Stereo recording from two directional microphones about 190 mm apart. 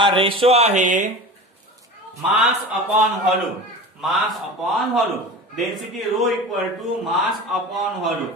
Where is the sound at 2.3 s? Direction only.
Centre (ahead or behind).